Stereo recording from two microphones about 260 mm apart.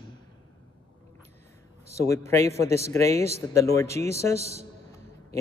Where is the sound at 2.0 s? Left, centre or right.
Centre.